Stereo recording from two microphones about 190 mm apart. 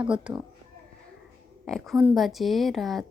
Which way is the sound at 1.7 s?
Centre (ahead or behind).